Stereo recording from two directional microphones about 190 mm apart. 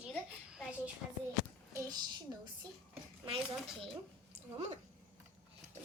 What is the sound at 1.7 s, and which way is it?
Speech, 15° right (ahead or behind).